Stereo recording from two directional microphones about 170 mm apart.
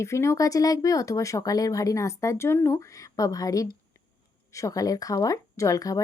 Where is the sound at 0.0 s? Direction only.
15° left (ahead or behind).